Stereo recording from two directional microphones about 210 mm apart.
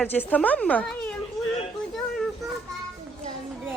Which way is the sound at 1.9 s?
Centre (ahead or behind).